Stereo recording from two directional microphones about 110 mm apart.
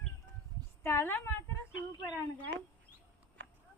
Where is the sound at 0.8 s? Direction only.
20° left (ahead or behind).